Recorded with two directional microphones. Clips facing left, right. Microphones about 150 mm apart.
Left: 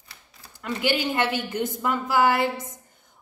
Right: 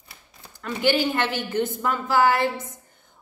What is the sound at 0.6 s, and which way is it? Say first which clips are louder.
A woman's voice: right 3 dB; 15° left (ahead or behind).